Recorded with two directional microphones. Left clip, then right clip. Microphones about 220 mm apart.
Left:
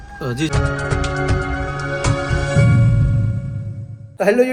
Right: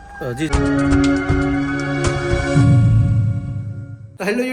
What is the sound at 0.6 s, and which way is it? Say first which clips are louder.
Music: right 5 dB; centre (ahead or behind).